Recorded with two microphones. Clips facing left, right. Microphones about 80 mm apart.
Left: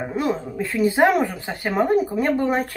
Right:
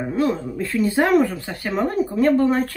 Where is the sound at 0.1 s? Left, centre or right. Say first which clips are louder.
Right 4 dB; centre.